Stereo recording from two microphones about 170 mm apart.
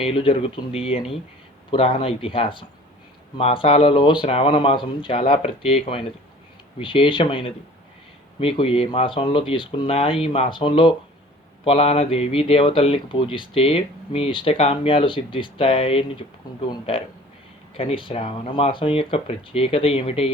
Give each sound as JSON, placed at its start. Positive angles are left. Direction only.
{"t": 0.0, "sound": "a man's voice", "side_deg": 30}